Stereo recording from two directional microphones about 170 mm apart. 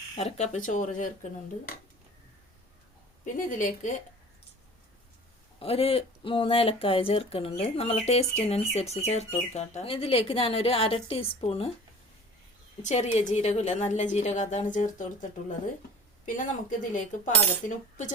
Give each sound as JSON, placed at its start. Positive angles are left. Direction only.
{"t": 0.2, "sound": "a woman's voice", "side_deg": 40}
{"t": 3.3, "sound": "a woman's voice", "side_deg": 50}
{"t": 5.5, "sound": "speech", "side_deg": 35}
{"t": 12.8, "sound": "a woman's voice", "side_deg": 40}